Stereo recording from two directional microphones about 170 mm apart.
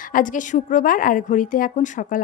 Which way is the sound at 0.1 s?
50° left (ahead or behind).